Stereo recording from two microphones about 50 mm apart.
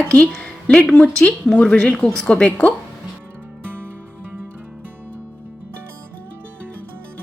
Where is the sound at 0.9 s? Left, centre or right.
Centre.